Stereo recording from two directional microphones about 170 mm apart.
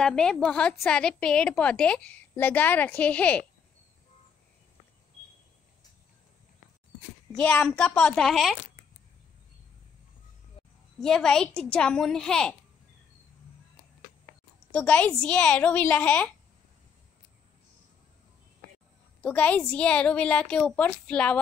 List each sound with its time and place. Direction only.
0.0 s a woman's voice: 5° left (ahead or behind)
7.3 s a child's voice: 5° left (ahead or behind)
10.6 s a sound: 35° left (ahead or behind)
11.0 s a child's voice: 5° left (ahead or behind)
14.7 s a woman's voice: 5° left (ahead or behind)
19.2 s a woman's voice: 10° left (ahead or behind)